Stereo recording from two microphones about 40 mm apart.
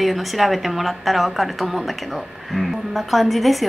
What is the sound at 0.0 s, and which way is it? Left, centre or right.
A woman's voice, centre.